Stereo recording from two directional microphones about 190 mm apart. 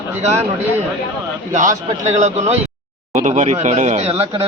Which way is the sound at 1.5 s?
40° right (ahead or behind).